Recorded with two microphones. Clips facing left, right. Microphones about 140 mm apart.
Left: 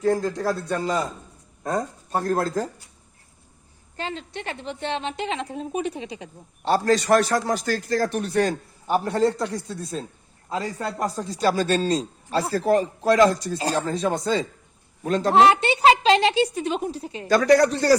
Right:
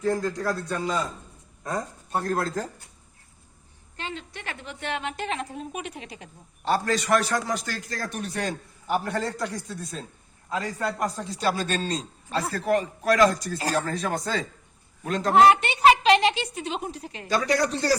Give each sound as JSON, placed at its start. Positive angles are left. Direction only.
{"t": 0.0, "sound": "a man's voice", "side_deg": 30}
{"t": 3.9, "sound": "a woman's voice", "side_deg": 35}
{"t": 9.0, "sound": "a woman's voice", "side_deg": 25}
{"t": 15.0, "sound": "a woman's voice", "side_deg": 35}
{"t": 17.0, "sound": "a man's voice", "side_deg": 30}
{"t": 17.3, "sound": "speech", "side_deg": 50}